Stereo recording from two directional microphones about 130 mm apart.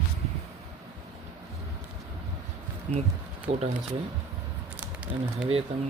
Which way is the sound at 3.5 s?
45° right (ahead or behind).